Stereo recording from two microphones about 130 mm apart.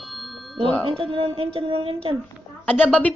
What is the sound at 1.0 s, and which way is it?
Speech, 45° right (ahead or behind).